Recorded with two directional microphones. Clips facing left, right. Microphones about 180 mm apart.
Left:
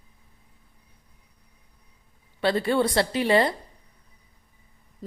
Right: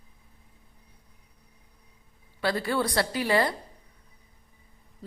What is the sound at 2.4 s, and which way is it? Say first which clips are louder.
Speech: left 5 dB; 25° left (ahead or behind).